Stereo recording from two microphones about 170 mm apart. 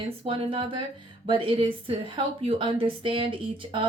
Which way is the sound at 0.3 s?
30° right (ahead or behind).